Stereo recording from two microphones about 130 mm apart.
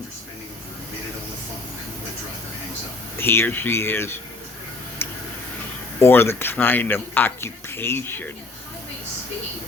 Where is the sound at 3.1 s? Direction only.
20° left (ahead or behind).